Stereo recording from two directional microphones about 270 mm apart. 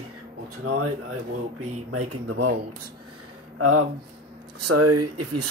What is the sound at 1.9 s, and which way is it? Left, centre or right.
Speech, right.